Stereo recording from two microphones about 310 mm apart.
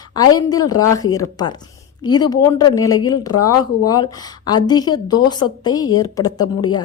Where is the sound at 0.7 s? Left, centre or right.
Left.